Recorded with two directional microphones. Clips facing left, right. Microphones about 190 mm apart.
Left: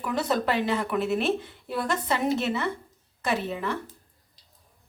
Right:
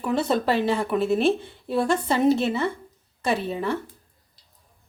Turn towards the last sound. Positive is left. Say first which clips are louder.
# right 3 dB
turn(degrees=-30)  # may be behind; listen again after turning